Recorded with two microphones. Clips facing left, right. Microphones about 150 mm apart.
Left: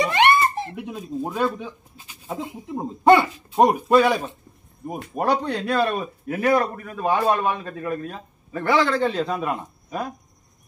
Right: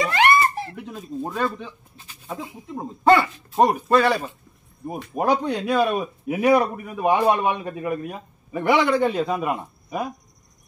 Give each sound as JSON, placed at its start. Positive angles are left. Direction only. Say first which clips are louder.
{"t": 0.0, "sound": "a sound", "louder": "left 1 dB", "side_deg": 20}
{"t": 0.6, "sound": "speech", "louder": "left 2 dB", "side_deg": 20}
{"t": 2.2, "sound": "speech", "louder": "left 3 dB", "side_deg": 20}
{"t": 3.4, "sound": "speech", "louder": "left 1 dB", "side_deg": 0}
{"t": 4.8, "sound": "speech", "louder": "right 1 dB", "side_deg": -5}